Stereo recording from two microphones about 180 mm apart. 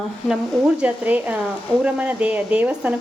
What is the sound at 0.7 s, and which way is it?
A woman's voice, 10° right (ahead or behind).